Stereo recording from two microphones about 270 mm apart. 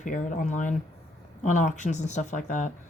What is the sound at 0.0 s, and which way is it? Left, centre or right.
Speech, left.